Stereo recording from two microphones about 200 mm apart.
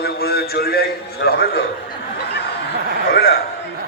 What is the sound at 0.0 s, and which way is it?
A man's voice, 50° left (ahead or behind).